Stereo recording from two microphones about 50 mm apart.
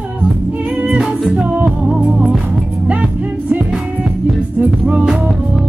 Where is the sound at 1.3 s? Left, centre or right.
Right.